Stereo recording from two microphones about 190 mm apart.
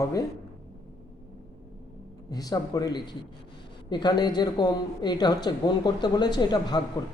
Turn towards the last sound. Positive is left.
turn(degrees=20)  # may be behind; listen again after turning